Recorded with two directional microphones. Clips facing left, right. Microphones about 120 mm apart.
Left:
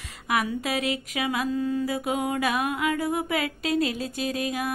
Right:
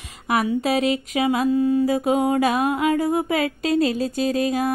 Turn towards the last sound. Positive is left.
turn(degrees=-35)  # may be behind; listen again after turning